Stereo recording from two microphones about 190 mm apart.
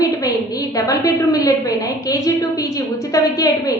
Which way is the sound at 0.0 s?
20° left (ahead or behind).